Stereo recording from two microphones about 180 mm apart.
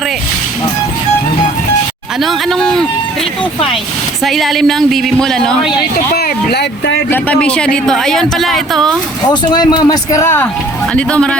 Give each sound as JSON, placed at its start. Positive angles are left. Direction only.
{"t": 2.2, "sound": "speech", "side_deg": 0}
{"t": 4.2, "sound": "speech", "side_deg": 0}
{"t": 6.1, "sound": "speech", "side_deg": 65}
{"t": 7.4, "sound": "speech", "side_deg": 5}
{"t": 9.3, "sound": "speech", "side_deg": 25}